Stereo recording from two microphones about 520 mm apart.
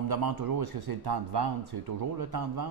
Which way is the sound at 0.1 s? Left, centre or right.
Right.